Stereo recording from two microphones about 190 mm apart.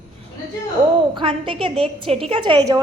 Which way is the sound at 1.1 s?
30° right (ahead or behind).